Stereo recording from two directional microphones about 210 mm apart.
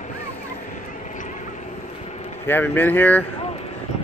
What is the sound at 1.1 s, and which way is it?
Vehicle, 35° left (ahead or behind).